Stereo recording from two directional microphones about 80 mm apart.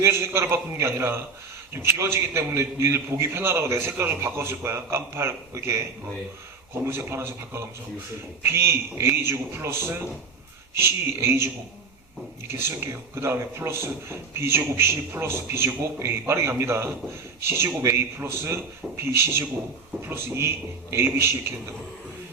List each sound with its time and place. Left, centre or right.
0.0 s a man's voice: right
6.8 s a man's voice: right
12.5 s a man's voice: right